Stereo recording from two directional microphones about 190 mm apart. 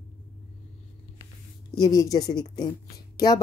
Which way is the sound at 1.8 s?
20° left (ahead or behind).